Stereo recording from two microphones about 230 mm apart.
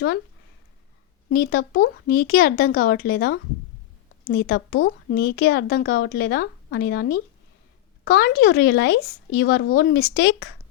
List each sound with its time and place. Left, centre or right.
1.3 s a woman's voice: left